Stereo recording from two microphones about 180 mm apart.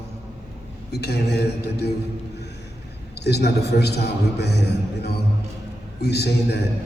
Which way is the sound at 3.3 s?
65° left (ahead or behind).